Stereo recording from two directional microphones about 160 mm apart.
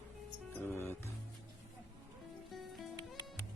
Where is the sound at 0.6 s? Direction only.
15° left (ahead or behind).